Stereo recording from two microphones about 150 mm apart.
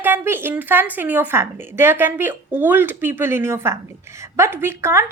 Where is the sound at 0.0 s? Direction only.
15° right (ahead or behind).